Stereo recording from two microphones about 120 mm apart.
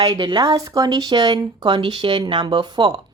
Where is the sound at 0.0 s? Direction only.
40° right (ahead or behind).